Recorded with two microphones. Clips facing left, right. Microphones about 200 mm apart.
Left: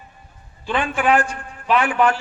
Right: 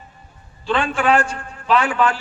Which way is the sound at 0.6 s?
15° left (ahead or behind).